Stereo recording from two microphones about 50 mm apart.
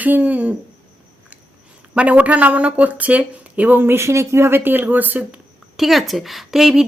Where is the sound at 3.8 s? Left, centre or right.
Right.